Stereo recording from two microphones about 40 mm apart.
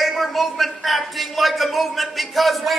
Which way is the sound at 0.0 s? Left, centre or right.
Centre.